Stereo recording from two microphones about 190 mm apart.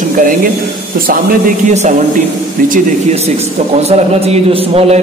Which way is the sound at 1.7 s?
40° right (ahead or behind).